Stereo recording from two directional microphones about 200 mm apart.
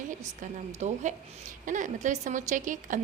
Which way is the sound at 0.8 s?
35° right (ahead or behind).